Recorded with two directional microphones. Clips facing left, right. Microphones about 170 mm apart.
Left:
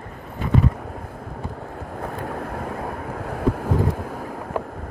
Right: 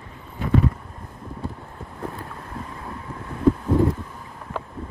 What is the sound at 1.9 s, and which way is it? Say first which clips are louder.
Boat: left 4 dB; 65° left (ahead or behind).